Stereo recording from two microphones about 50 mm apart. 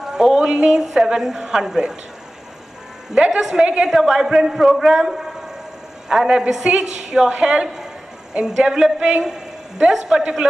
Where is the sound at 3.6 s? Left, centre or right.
Right.